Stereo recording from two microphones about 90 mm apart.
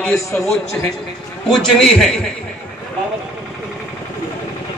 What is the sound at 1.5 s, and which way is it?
Speech, centre (ahead or behind).